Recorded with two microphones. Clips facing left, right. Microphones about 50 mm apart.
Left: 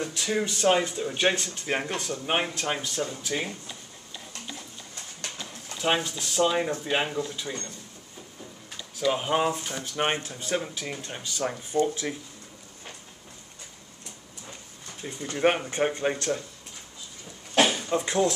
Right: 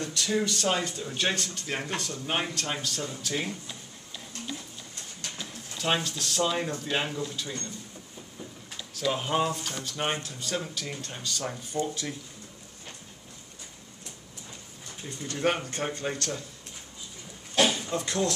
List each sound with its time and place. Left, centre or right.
0.0 s speech: centre
8.9 s speech: centre
15.0 s speech: centre
17.8 s speech: left